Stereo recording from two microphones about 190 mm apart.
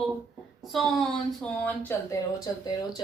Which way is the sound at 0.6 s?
Centre (ahead or behind).